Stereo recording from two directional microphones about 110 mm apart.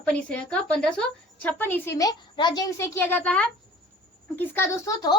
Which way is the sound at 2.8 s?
20° left (ahead or behind).